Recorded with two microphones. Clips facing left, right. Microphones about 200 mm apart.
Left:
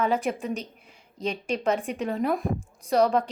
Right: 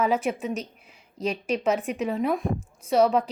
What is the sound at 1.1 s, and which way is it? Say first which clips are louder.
Speech: right 2 dB; 30° left (ahead or behind).